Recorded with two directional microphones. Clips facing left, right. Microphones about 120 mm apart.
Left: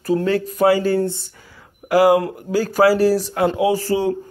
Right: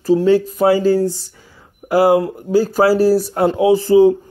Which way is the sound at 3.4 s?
25° right (ahead or behind).